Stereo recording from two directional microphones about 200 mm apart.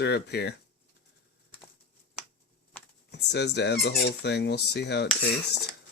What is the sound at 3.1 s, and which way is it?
Speech, 60° left (ahead or behind).